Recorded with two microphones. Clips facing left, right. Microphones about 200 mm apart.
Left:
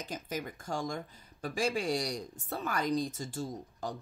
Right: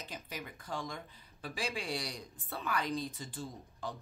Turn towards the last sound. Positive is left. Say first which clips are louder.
# left 5 dB
turn(degrees=45)  # may be behind; listen again after turning